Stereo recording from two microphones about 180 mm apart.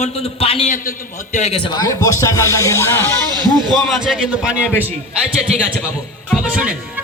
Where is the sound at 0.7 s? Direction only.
50° left (ahead or behind).